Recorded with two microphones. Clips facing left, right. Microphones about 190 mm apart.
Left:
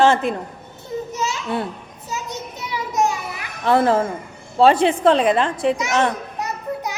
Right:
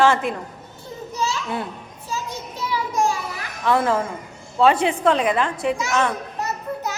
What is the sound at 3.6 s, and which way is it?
A woman's voice, 35° left (ahead or behind).